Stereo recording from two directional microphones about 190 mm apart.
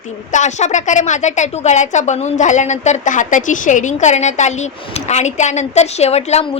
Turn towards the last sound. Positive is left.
turn(degrees=35)  # may be behind; listen again after turning